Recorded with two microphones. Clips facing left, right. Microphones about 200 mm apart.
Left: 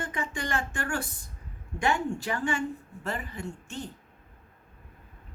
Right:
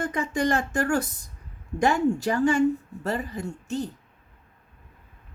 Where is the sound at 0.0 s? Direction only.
40° right (ahead or behind).